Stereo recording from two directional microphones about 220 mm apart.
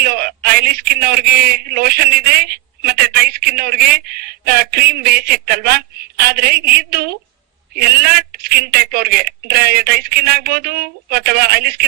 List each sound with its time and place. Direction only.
0.0 s speech: 45° right (ahead or behind)